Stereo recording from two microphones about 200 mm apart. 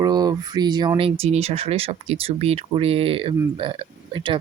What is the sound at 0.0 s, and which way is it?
Speech, 20° right (ahead or behind).